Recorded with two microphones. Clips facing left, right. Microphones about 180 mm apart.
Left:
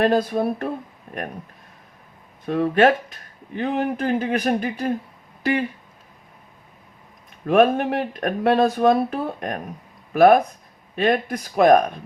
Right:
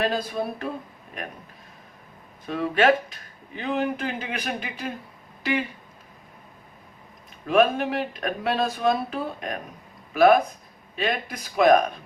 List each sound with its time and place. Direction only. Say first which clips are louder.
0.0 s speech: left 7 dB; 50° left (ahead or behind)
2.5 s speech: left 4 dB; 45° left (ahead or behind)
7.4 s speech: left 4 dB; 50° left (ahead or behind)